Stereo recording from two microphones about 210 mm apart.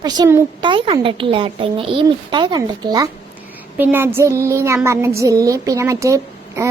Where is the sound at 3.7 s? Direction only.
10° right (ahead or behind).